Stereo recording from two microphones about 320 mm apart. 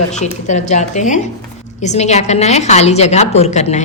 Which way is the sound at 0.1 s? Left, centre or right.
Left.